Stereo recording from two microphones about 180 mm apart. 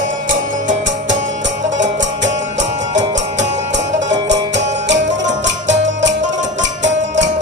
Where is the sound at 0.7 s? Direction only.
90° right.